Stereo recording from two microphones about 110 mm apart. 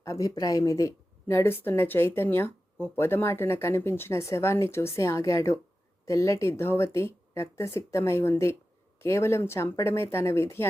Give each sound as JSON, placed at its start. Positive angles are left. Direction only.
{"t": 0.0, "sound": "speech", "side_deg": 30}